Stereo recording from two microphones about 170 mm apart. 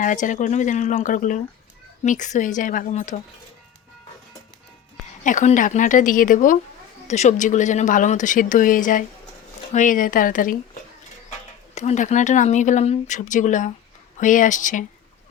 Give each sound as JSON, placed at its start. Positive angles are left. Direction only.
{"t": 0.0, "sound": "speech", "side_deg": 50}
{"t": 5.2, "sound": "speech", "side_deg": 45}
{"t": 11.3, "sound": "speech", "side_deg": 40}